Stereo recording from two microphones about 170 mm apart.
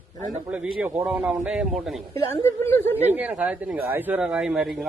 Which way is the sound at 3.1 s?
10° right (ahead or behind).